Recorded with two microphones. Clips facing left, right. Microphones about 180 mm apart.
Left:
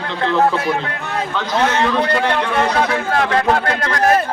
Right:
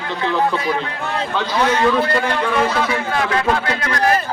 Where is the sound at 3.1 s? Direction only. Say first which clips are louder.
Left 3 dB; 45° left (ahead or behind).